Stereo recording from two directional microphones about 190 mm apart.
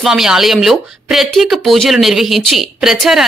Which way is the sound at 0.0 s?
Centre (ahead or behind).